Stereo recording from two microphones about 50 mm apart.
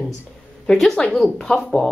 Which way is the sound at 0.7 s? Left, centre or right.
Centre.